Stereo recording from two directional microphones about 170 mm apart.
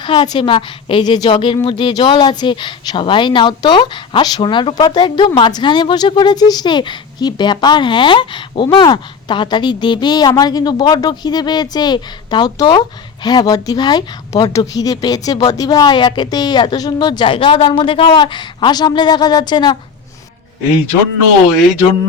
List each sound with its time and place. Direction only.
0.0 s speech: 25° left (ahead or behind)